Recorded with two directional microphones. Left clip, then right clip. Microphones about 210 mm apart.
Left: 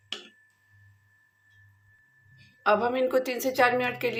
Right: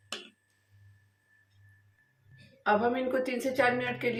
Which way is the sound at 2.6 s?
50° left (ahead or behind).